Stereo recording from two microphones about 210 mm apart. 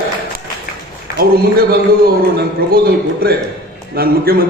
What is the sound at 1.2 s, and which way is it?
A man's voice, 45° right (ahead or behind).